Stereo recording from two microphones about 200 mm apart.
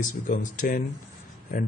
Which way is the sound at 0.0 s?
40° left (ahead or behind).